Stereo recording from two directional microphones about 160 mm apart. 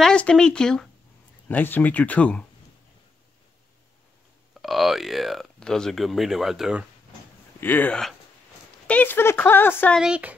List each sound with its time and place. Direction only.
0.0 s speech: 5° left (ahead or behind)
4.6 s speech: centre (ahead or behind)
7.6 s speech: 10° left (ahead or behind)
9.9 s speech: 5° right (ahead or behind)